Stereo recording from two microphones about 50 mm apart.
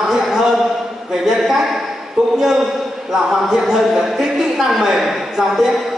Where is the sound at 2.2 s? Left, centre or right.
Centre.